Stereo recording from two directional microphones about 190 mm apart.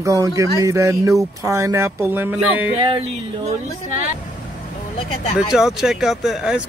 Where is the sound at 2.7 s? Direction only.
30° right (ahead or behind).